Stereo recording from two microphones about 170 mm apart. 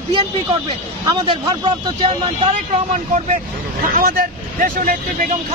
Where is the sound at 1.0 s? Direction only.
25° right (ahead or behind).